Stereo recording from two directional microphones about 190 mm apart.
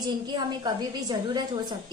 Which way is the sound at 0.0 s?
20° right (ahead or behind).